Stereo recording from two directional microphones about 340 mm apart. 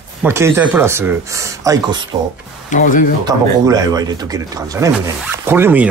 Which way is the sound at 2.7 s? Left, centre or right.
Left.